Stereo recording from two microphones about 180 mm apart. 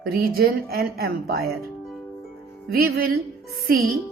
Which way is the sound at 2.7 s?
60° right (ahead or behind).